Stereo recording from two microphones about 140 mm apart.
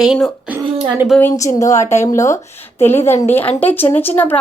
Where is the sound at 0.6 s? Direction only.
45° right (ahead or behind).